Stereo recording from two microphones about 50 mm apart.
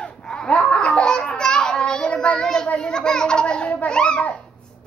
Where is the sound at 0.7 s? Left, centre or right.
Centre.